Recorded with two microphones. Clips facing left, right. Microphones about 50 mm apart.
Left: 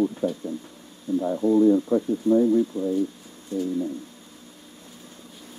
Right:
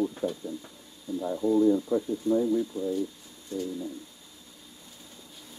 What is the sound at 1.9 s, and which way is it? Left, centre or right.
Speech, left.